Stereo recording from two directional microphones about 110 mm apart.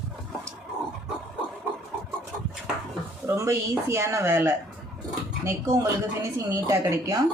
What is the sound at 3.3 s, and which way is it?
Speech, 25° right (ahead or behind).